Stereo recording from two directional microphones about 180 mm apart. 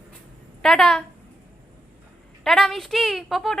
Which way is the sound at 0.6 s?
5° left (ahead or behind).